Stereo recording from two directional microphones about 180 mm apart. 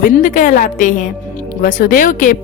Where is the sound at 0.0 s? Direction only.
50° left (ahead or behind).